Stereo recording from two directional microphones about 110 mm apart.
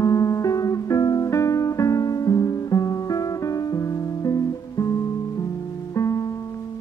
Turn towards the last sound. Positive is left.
turn(degrees=30)  # may be behind; listen again after turning